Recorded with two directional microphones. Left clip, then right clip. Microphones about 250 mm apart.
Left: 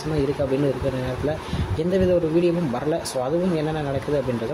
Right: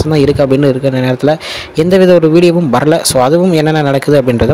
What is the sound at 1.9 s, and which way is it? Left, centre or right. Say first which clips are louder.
Speech: right 14 dB; right.